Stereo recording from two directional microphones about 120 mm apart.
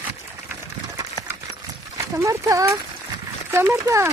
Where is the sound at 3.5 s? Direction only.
20° right (ahead or behind).